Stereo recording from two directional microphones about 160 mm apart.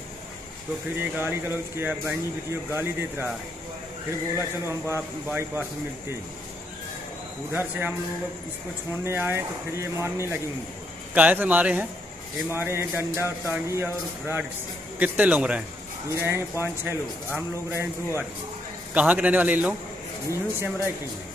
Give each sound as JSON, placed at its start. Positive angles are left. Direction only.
{"t": 0.9, "sound": "a man's voice", "side_deg": -10}
{"t": 4.4, "sound": "a man's voice", "side_deg": -15}
{"t": 7.5, "sound": "a man's voice", "side_deg": -10}
{"t": 9.0, "sound": "a man's voice", "side_deg": -15}